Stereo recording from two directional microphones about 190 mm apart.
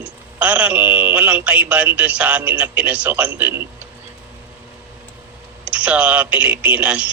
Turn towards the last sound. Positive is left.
turn(degrees=-5)  # may be behind; listen again after turning